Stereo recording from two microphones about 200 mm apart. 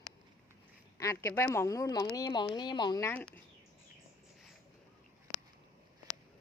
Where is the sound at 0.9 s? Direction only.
15° left (ahead or behind).